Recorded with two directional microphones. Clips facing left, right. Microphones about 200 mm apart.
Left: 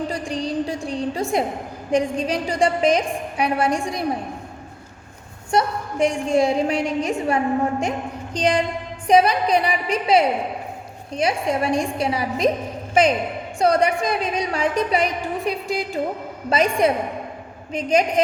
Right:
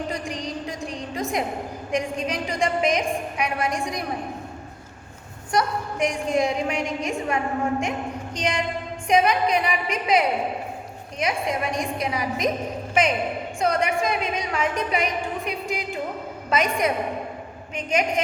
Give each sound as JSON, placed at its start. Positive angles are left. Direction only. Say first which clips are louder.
{"t": 0.1, "sound": "a sound", "louder": "left 5 dB", "side_deg": 30}
{"t": 1.9, "sound": "a woman's voice", "louder": "left 6 dB", "side_deg": 30}
{"t": 5.5, "sound": "a woman's voice", "louder": "left 3 dB", "side_deg": 25}